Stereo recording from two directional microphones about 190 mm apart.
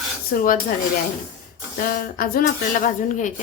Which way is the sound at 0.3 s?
45° left (ahead or behind).